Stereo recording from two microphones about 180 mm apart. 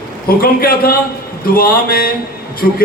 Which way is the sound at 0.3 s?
55° left (ahead or behind).